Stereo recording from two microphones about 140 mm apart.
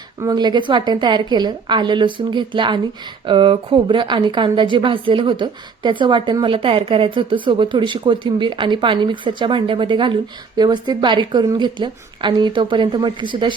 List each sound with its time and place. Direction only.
0.2 s a woman's voice: 30° right (ahead or behind)